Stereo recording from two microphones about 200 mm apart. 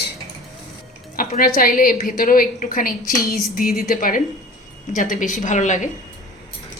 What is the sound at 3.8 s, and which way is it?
A woman's voice, 45° left (ahead or behind).